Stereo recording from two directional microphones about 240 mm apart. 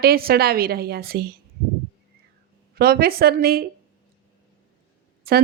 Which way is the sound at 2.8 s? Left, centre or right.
Right.